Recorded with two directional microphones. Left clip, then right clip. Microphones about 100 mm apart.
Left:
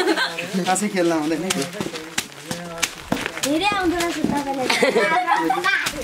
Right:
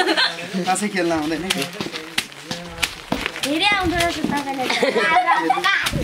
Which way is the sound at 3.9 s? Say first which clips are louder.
Right 2 dB; 15° right (ahead or behind).